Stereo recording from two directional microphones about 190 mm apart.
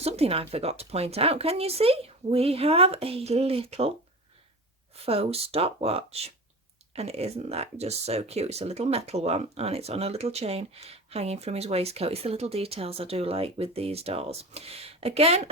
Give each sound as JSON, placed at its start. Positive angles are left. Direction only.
{"t": 0.0, "sound": "speech", "side_deg": -30}
{"t": 5.0, "sound": "speech", "side_deg": -30}